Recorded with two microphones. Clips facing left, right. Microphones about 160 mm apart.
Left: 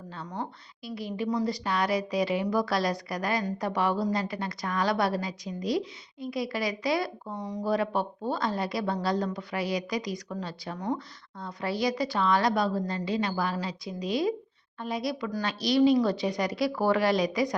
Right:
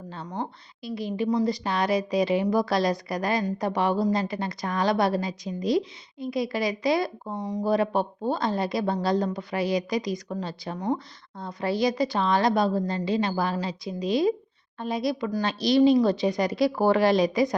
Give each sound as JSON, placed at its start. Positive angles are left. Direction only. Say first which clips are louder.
{"t": 0.9, "sound": "a woman's voice", "louder": "right 4 dB", "side_deg": -25}